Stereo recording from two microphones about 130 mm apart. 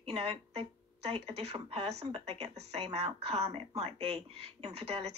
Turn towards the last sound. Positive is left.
turn(degrees=-50)  # may be behind; listen again after turning